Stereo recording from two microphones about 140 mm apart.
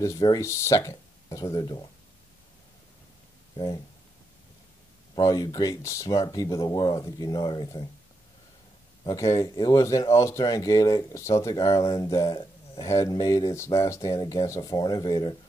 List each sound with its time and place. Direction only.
0.4 s speech: 20° left (ahead or behind)
3.5 s speech: 35° left (ahead or behind)
5.1 s speech: 25° left (ahead or behind)
9.0 s speech: 25° left (ahead or behind)